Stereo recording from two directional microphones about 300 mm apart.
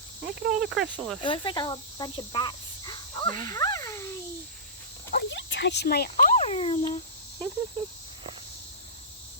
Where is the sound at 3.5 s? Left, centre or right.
Centre.